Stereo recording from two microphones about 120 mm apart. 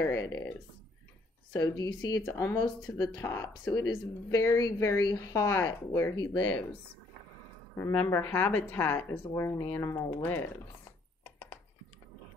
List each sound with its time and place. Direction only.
0.0 s speech: 25° left (ahead or behind)
1.5 s speech: 30° left (ahead or behind)
3.8 s speech: 35° left (ahead or behind); by 6.6 s 15° left (ahead or behind)
7.9 s speech: 15° left (ahead or behind)